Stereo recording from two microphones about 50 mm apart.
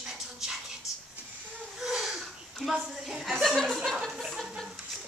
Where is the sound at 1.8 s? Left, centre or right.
Centre.